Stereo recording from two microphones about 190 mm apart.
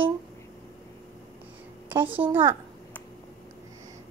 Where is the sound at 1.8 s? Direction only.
10° right (ahead or behind).